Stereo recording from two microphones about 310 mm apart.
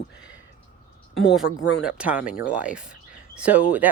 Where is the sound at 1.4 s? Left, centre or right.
Left.